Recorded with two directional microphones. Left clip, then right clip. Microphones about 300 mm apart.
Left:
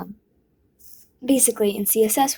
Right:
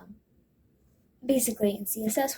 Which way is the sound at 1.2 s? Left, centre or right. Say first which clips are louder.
Left 6 dB; left.